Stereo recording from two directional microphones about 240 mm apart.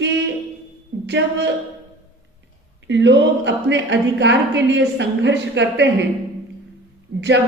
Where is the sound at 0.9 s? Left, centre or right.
Right.